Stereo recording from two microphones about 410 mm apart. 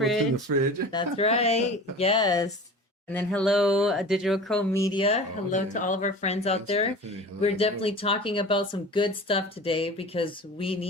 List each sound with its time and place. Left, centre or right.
0.5 s speech: right
0.9 s speech: centre